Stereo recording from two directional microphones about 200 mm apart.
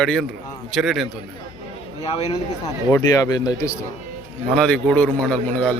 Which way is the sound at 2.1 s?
30° left (ahead or behind).